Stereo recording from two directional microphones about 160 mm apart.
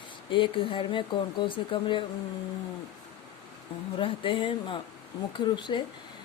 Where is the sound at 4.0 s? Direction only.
30° left (ahead or behind).